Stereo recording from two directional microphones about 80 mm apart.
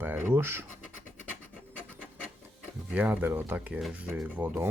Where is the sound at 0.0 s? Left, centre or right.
Right.